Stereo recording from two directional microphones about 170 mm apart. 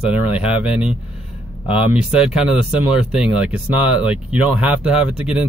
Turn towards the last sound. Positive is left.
turn(degrees=-5)  # may be behind; listen again after turning